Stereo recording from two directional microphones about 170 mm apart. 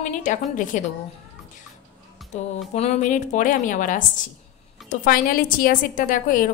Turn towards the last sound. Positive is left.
turn(degrees=50)  # may be behind; listen again after turning